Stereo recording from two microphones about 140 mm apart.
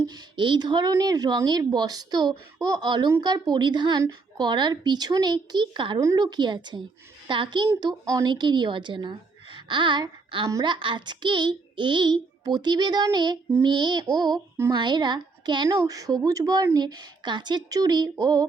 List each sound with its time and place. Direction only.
0.1 s a woman's voice: 35° right (ahead or behind)
6.0 s a woman's voice: 25° right (ahead or behind)
6.2 s a woman's voice: 35° right (ahead or behind)